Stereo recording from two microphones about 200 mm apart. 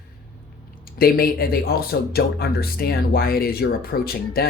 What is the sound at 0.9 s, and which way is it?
Speech, 50° left (ahead or behind).